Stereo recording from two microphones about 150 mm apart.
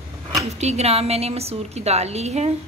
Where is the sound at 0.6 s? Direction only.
45° right (ahead or behind).